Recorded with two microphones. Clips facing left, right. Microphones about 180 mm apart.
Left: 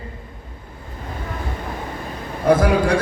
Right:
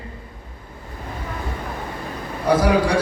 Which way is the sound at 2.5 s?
50° left (ahead or behind).